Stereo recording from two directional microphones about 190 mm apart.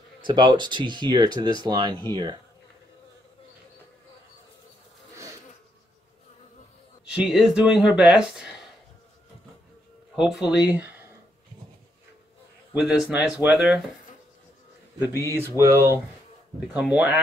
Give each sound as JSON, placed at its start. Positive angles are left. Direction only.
{"t": 0.2, "sound": "speech", "side_deg": -25}
{"t": 7.1, "sound": "speech", "side_deg": -5}
{"t": 10.1, "sound": "speech", "side_deg": -5}
{"t": 12.7, "sound": "speech", "side_deg": -5}
{"t": 15.0, "sound": "speech", "side_deg": -15}